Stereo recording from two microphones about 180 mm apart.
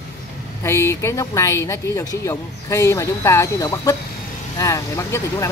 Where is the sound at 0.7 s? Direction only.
15° left (ahead or behind).